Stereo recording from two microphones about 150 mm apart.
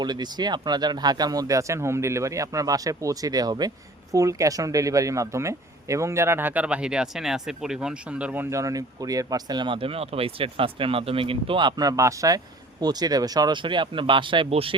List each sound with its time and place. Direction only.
0.0 s speech: 30° right (ahead or behind)